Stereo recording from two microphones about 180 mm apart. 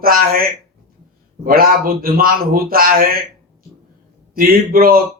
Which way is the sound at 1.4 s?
55° right (ahead or behind).